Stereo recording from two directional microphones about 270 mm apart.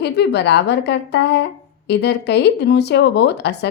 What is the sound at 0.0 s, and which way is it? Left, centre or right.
Speech, left.